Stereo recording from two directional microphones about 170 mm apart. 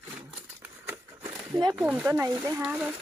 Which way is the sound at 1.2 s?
25° right (ahead or behind).